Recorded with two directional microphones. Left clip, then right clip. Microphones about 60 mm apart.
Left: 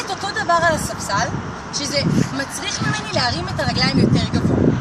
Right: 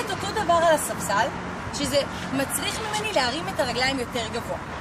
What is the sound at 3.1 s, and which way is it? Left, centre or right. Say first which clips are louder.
Speech: left 2 dB; right.